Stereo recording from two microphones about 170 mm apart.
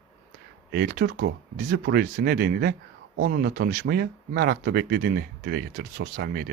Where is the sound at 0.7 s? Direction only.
65° right (ahead or behind).